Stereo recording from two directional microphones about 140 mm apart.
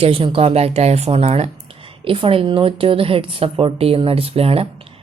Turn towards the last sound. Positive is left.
turn(degrees=-45)  # may be behind; listen again after turning